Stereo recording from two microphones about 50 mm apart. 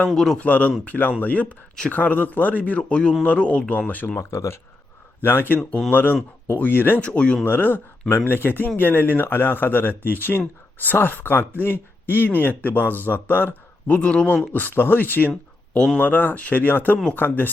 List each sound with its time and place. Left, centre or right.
0.1 s speech: centre
0.3 s a man's voice: left
4.2 s speech: left
5.2 s a man's voice: left
7.0 s speech: left
7.4 s speech: left
13.8 s speech: left
14.5 s a man's voice: left